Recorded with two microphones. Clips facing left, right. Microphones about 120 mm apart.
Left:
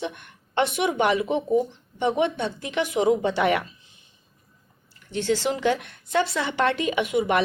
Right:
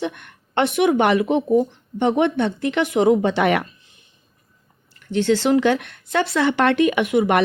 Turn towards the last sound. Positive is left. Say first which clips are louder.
# right 4 dB
turn(degrees=-60)  # may be behind; listen again after turning